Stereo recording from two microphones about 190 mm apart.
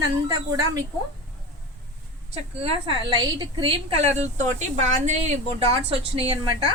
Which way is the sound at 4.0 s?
35° right (ahead or behind).